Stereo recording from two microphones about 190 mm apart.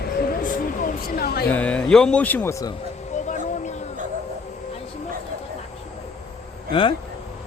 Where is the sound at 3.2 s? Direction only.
40° left (ahead or behind).